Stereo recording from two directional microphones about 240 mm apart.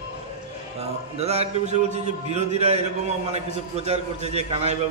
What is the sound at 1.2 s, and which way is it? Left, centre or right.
A man's voice, right.